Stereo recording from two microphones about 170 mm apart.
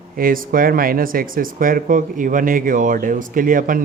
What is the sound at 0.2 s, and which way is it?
Speech, 55° right (ahead or behind).